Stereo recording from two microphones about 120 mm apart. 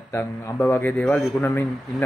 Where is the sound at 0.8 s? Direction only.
10° left (ahead or behind).